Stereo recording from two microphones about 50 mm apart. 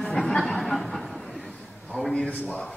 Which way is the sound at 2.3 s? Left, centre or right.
Left.